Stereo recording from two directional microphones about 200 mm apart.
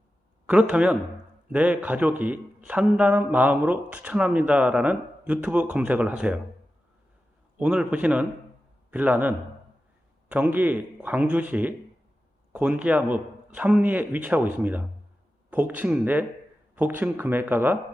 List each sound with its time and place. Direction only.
0.4 s a man's voice: 5° right (ahead or behind)
7.6 s speech: 5° right (ahead or behind)